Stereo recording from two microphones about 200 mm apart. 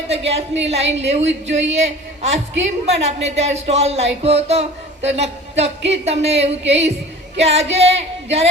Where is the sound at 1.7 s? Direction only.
35° right (ahead or behind).